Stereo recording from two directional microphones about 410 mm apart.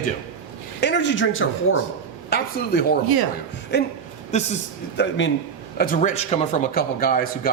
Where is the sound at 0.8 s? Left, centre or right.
Left.